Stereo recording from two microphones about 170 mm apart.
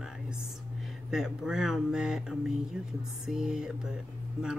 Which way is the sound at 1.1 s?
5° right (ahead or behind).